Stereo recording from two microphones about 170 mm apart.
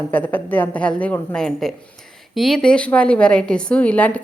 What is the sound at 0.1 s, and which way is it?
A woman's voice, 10° left (ahead or behind).